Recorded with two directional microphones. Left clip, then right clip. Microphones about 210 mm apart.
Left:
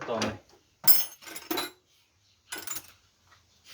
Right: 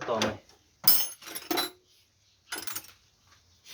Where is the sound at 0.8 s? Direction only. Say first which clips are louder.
Right 2 dB; 10° right (ahead or behind).